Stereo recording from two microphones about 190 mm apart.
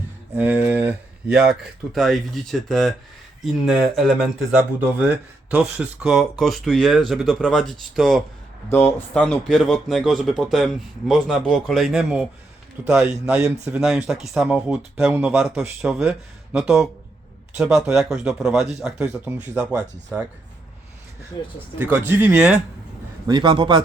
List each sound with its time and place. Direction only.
0.3 s speech: 5° right (ahead or behind)
4.5 s speech: 10° right (ahead or behind)
21.4 s speech: 20° left (ahead or behind)
21.8 s speech: 10° right (ahead or behind)
23.2 s a man's voice: 20° right (ahead or behind)